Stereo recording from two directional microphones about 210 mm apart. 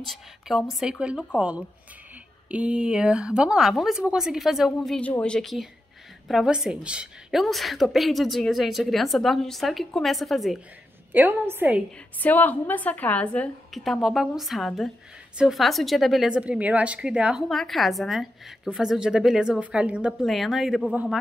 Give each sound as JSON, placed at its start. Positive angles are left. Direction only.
{"t": 0.0, "sound": "a woman's voice", "side_deg": 0}
{"t": 2.5, "sound": "a woman's voice", "side_deg": -5}
{"t": 12.2, "sound": "a woman's voice", "side_deg": 10}